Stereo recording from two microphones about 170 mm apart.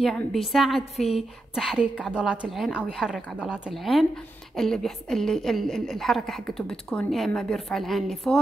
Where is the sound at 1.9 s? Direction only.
10° left (ahead or behind).